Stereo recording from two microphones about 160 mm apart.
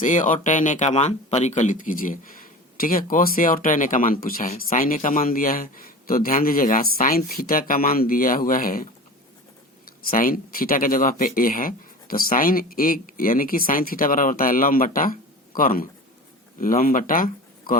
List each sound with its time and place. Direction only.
0.0 s speech: 55° left (ahead or behind)
10.1 s speech: 60° left (ahead or behind)